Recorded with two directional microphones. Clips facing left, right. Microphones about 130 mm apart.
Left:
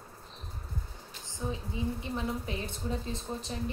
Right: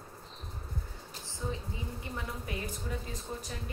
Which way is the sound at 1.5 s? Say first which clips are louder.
Left 7 dB; 20° left (ahead or behind).